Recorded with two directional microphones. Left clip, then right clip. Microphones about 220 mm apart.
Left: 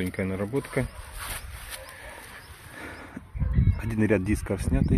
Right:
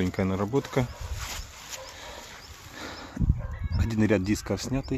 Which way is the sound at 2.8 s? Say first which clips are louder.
Right 1 dB; 5° right (ahead or behind).